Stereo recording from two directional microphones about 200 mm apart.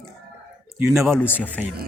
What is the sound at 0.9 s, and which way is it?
Speech, centre (ahead or behind).